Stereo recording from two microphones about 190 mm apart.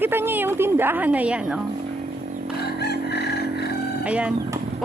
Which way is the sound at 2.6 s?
60° left (ahead or behind).